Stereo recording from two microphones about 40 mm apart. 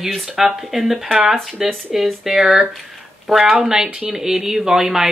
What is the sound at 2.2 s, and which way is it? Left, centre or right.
Speech, centre.